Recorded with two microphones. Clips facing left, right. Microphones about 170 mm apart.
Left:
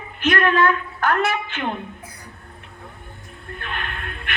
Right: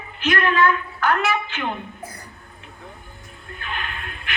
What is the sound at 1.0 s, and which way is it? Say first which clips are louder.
Speech: left 1 dB; 45° left (ahead or behind).